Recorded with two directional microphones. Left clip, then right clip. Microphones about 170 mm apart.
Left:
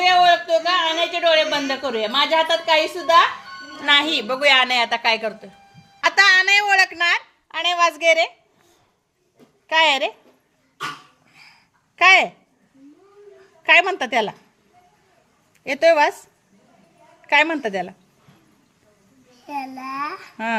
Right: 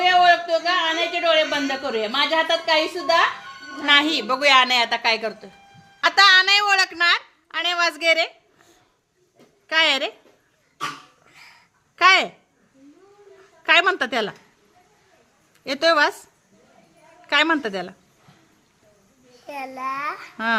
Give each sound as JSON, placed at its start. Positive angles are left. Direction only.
{"t": 0.0, "sound": "a man's voice", "side_deg": 0}
{"t": 9.6, "sound": "a woman's voice", "side_deg": -5}
{"t": 11.3, "sound": "dog", "side_deg": -25}
{"t": 11.9, "sound": "a woman's voice", "side_deg": -5}
{"t": 13.7, "sound": "a woman's voice", "side_deg": -10}
{"t": 15.6, "sound": "a woman's voice", "side_deg": -10}
{"t": 17.2, "sound": "a woman's voice", "side_deg": -10}
{"t": 19.5, "sound": "a child's voice", "side_deg": -25}
{"t": 20.3, "sound": "speech", "side_deg": -10}